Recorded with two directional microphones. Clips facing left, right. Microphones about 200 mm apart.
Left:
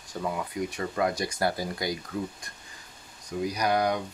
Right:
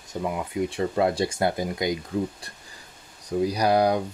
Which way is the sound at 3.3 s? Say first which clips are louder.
Right 5 dB; 35° right (ahead or behind).